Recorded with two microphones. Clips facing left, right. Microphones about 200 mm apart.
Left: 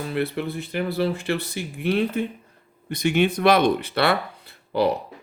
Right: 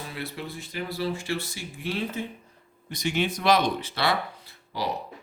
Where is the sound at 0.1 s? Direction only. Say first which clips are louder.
Left 10 dB; 60° left (ahead or behind).